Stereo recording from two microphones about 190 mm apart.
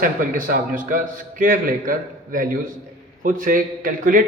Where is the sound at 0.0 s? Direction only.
45° right (ahead or behind).